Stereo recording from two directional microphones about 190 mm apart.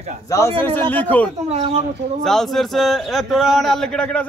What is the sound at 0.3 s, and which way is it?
A man's voice, 15° left (ahead or behind).